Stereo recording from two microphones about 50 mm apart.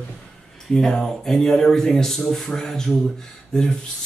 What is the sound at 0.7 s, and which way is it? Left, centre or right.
Speech, centre.